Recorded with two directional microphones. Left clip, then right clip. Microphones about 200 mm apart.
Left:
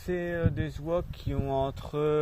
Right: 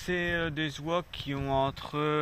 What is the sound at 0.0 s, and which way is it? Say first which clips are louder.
Speech: right 1 dB; 35° left (ahead or behind).